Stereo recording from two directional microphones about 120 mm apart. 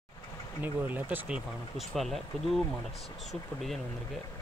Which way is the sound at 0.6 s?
15° right (ahead or behind).